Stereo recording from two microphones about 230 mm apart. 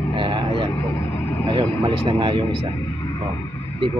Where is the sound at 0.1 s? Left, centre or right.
Right.